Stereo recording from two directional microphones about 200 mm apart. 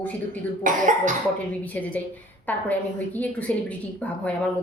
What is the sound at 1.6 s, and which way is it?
A woman's voice, 5° left (ahead or behind).